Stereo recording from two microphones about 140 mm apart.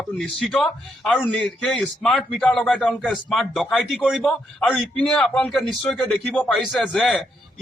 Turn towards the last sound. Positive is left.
turn(degrees=0)  # may be behind; listen again after turning